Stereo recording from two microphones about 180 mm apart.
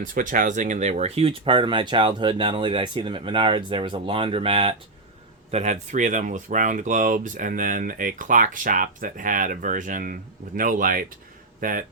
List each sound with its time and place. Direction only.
0.0 s speech: 50° right (ahead or behind)